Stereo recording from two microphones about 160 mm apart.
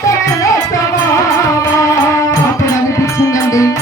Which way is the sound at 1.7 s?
20° left (ahead or behind).